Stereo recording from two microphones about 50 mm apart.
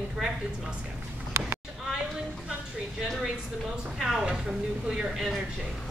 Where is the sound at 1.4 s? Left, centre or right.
Right.